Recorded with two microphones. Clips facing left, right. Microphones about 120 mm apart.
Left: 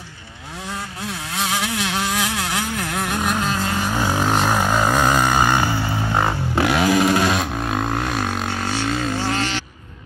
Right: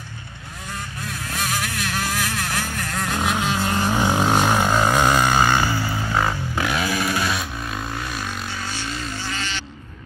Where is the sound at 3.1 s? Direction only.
Centre (ahead or behind).